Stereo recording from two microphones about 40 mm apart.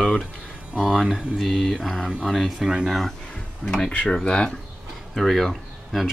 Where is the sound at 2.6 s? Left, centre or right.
Centre.